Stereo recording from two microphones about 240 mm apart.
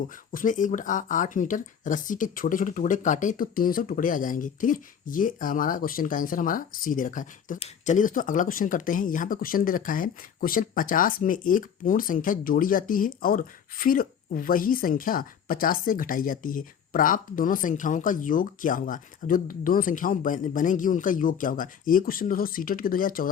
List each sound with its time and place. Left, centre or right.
0.3 s speech: left